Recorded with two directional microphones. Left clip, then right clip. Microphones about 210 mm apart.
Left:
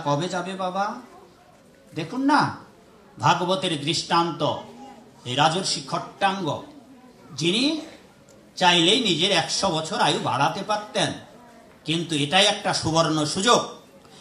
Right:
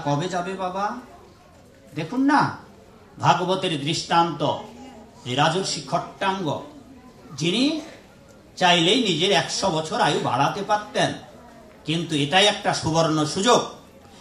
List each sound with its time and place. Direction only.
0.0 s speech: 35° left (ahead or behind)
2.0 s speech: 35° left (ahead or behind)